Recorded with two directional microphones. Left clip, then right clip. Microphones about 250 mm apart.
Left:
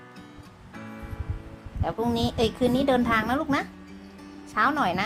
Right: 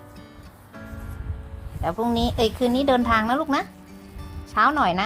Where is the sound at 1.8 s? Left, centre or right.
Centre.